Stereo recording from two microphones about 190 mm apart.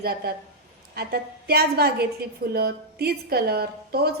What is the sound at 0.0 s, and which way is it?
A woman's voice, 55° right (ahead or behind).